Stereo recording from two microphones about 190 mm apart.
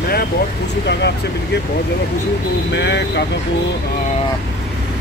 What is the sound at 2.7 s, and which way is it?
Speech, 65° left (ahead or behind).